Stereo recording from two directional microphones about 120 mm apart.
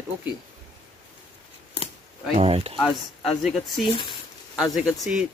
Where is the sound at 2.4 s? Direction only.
55° right (ahead or behind).